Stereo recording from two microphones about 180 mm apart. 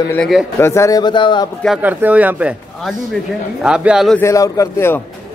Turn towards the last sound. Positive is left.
turn(degrees=15)  # may be behind; listen again after turning